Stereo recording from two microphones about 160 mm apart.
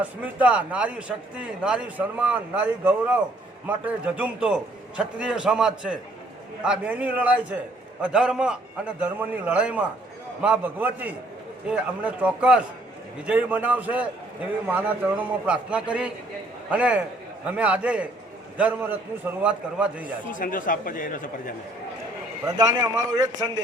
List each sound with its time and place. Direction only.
0.0 s a man's voice: 10° right (ahead or behind)
20.3 s speech: 55° left (ahead or behind)
22.4 s a man's voice: 25° right (ahead or behind)